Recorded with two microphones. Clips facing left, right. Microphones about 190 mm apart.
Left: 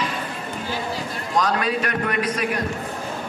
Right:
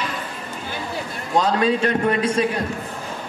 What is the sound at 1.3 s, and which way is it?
A man's voice, 30° right (ahead or behind).